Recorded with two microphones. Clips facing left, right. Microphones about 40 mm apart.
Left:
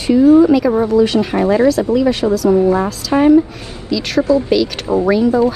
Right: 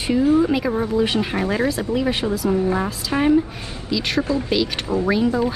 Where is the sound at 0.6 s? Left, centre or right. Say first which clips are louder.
Left 8 dB; centre.